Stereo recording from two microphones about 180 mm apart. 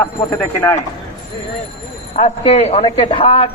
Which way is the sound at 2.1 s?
35° left (ahead or behind).